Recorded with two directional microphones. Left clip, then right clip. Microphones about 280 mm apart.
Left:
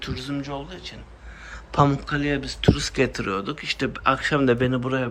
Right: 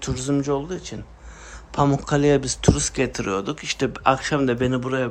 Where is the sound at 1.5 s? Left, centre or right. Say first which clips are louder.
Left 1 dB; centre.